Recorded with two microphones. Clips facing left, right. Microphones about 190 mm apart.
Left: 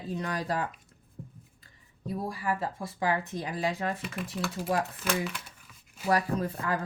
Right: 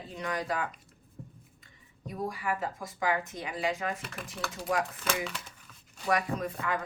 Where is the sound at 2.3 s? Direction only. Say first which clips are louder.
Left 2 dB; 30° left (ahead or behind).